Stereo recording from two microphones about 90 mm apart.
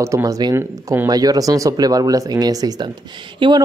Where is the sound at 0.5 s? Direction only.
25° right (ahead or behind).